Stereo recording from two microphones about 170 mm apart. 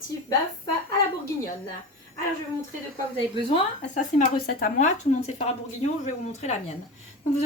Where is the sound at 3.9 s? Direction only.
50° left (ahead or behind).